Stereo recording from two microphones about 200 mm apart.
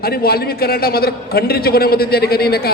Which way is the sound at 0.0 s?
50° left (ahead or behind).